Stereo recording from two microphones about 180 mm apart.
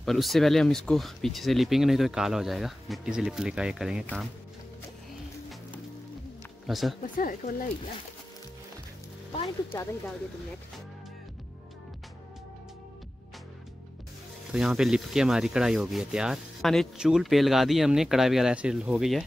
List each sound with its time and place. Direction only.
0.0 s rub: centre (ahead or behind)
6.7 s rub: centre (ahead or behind)
7.2 s speech: 50° left (ahead or behind)
14.5 s rub: centre (ahead or behind)